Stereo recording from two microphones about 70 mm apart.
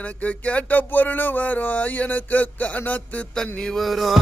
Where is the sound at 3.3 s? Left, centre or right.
Centre.